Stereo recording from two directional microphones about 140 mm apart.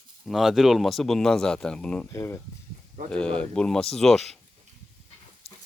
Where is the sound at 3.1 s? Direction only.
5° left (ahead or behind).